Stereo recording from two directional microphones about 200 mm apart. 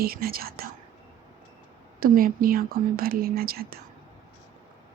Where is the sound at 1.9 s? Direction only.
45° right (ahead or behind).